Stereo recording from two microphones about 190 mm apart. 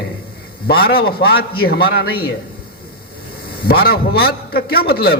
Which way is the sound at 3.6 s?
55° left (ahead or behind).